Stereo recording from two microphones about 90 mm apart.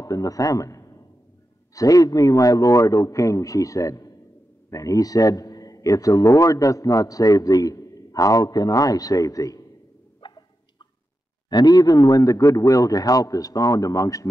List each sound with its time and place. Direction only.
0.0 s a man's voice: 40° left (ahead or behind)
10.2 s fowl: 60° left (ahead or behind)
11.4 s a man's voice: 50° left (ahead or behind)